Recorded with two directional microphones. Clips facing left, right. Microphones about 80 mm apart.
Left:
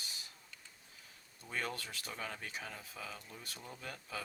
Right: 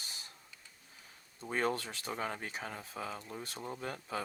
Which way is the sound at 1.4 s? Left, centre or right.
Right.